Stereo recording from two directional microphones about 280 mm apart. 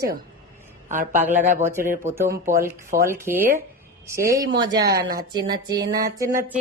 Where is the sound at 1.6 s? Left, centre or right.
Centre.